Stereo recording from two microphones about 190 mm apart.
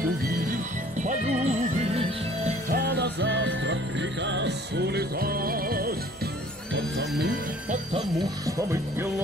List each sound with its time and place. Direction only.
1.0 s music: 35° right (ahead or behind)
2.7 s music: 60° right (ahead or behind)
6.7 s music: 65° right (ahead or behind)